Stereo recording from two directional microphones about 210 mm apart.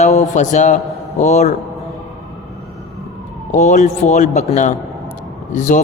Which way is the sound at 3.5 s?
35° left (ahead or behind).